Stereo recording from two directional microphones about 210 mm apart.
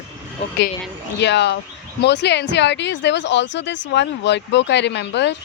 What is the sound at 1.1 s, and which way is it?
Speech, 55° left (ahead or behind).